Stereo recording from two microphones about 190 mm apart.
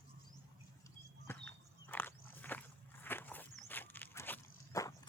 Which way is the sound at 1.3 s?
10° left (ahead or behind).